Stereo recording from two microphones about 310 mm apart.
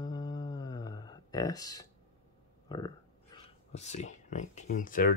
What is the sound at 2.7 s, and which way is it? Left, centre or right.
Speech, centre.